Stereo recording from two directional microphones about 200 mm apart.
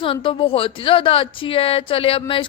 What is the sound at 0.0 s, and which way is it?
A woman's voice, 25° left (ahead or behind).